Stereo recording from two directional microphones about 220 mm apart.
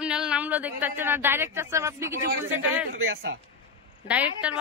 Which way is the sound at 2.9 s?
65° right (ahead or behind).